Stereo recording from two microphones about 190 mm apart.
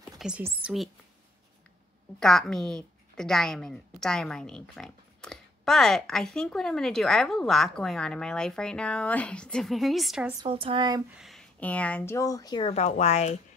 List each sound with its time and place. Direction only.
0.2 s a woman's voice: 5° right (ahead or behind)
2.1 s a woman's voice: 5° left (ahead or behind)
10.4 s a woman's voice: 30° right (ahead or behind)
11.1 s speech: centre (ahead or behind); by 12.7 s 20° left (ahead or behind)
12.7 s speech: 35° left (ahead or behind)